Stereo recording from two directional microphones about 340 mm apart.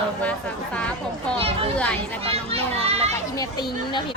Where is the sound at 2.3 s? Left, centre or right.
Centre.